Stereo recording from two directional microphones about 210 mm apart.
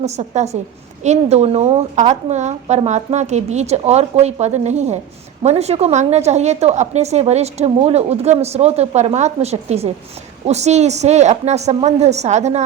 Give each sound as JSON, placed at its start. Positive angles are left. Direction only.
{"t": 0.0, "sound": "a woman's voice", "side_deg": -30}